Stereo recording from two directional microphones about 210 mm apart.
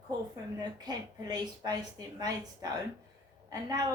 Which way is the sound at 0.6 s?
20° right (ahead or behind).